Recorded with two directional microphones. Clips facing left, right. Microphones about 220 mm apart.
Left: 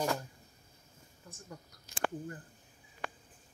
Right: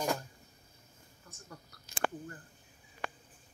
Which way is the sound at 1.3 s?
20° left (ahead or behind).